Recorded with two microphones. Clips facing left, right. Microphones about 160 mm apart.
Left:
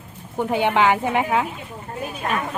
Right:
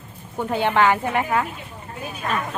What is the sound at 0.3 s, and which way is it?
A woman's voice, 15° left (ahead or behind).